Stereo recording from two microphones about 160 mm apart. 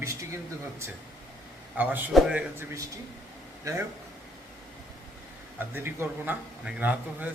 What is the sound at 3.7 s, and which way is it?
Speech, 20° right (ahead or behind).